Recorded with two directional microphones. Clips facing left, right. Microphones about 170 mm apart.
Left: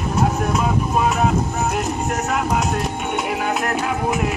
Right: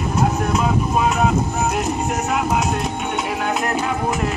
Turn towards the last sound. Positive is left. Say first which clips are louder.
# even
turn(degrees=10)  # may be behind; listen again after turning